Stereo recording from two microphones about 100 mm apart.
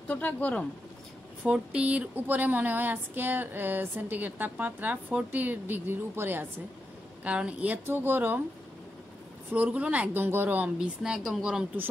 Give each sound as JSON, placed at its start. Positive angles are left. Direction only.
{"t": 0.1, "sound": "speech", "side_deg": 15}
{"t": 1.4, "sound": "a sound", "side_deg": -10}
{"t": 9.5, "sound": "a woman's voice", "side_deg": -15}
{"t": 11.0, "sound": "a woman's voice", "side_deg": -5}